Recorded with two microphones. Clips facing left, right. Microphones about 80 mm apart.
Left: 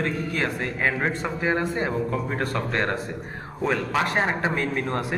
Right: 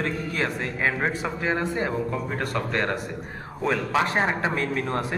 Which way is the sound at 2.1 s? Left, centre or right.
Left.